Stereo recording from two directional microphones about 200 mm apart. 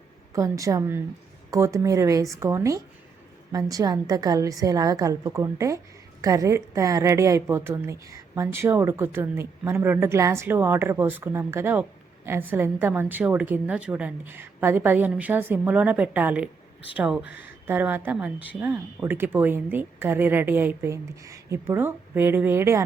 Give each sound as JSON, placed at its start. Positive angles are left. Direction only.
{"t": 0.3, "sound": "a woman's voice", "side_deg": -15}